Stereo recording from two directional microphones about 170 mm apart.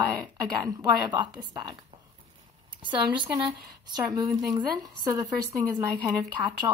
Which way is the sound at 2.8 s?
30° right (ahead or behind).